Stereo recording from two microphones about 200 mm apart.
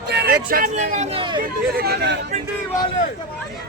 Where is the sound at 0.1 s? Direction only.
55° right (ahead or behind); by 1.4 s 25° right (ahead or behind).